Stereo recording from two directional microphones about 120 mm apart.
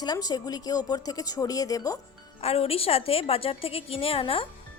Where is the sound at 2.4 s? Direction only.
55° left (ahead or behind).